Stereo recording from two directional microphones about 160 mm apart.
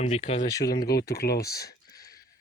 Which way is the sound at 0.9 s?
75° left (ahead or behind).